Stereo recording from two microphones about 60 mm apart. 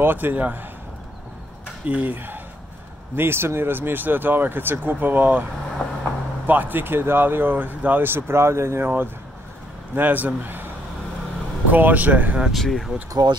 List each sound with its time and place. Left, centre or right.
0.0 s speech: right
1.9 s speech: right
3.2 s speech: right
5.8 s vehicle: centre
6.4 s speech: right
8.8 s speech: right
11.7 s speech: right
12.4 s speech: centre